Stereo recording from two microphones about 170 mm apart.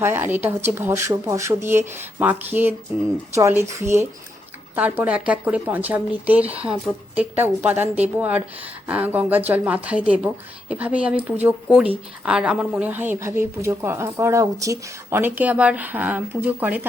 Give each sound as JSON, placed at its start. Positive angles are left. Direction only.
{"t": 0.0, "sound": "speech", "side_deg": -15}